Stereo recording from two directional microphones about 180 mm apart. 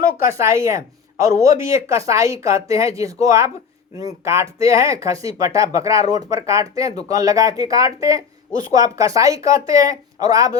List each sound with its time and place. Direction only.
0.3 s speech: 15° right (ahead or behind)